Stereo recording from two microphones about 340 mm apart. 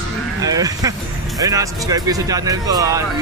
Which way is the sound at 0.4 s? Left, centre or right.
Centre.